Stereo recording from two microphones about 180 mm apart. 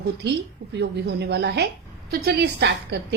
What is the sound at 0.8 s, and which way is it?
A woman's voice, 65° right (ahead or behind).